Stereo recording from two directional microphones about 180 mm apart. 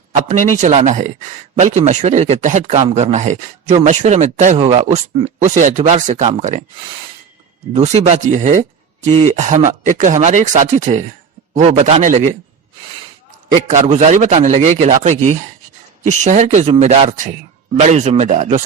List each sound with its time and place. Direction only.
0.3 s speech: 40° right (ahead or behind)
7.7 s speech: 35° right (ahead or behind)
13.7 s speech: 40° right (ahead or behind)